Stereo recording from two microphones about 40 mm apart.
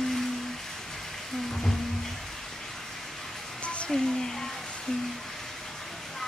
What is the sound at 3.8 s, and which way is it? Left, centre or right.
Speech, centre.